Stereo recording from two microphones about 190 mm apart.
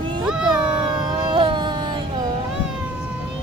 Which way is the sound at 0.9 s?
25° right (ahead or behind).